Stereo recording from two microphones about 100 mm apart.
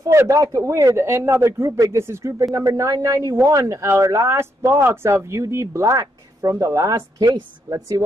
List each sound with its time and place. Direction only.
0.0 s speech: 30° right (ahead or behind)